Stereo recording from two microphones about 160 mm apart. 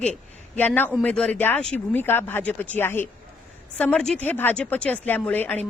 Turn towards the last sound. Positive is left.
turn(degrees=10)  # may be behind; listen again after turning